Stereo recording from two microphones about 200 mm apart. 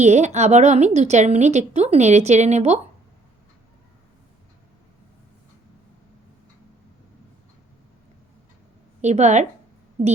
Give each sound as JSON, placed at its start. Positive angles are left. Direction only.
{"t": 0.0, "sound": "a woman's voice", "side_deg": -35}
{"t": 9.0, "sound": "a woman's voice", "side_deg": -35}